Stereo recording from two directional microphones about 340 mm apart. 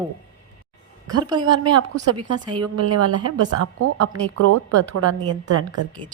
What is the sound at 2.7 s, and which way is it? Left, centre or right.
A woman's voice, right.